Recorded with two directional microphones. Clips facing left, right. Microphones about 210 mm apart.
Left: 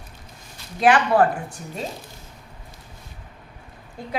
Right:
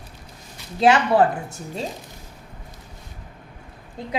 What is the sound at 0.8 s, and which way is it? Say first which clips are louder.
Speech: right 1 dB; 25° right (ahead or behind).